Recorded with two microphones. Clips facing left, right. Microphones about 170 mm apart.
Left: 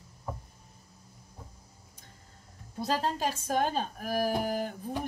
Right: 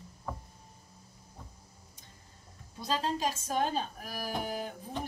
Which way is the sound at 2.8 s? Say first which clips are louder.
Left 2 dB; 50° left (ahead or behind).